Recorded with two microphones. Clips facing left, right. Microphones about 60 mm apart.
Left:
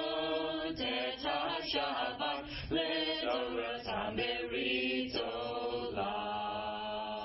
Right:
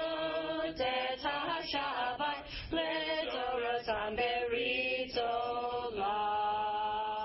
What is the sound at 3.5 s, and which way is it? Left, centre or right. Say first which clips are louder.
A capella: right 4 dB; centre.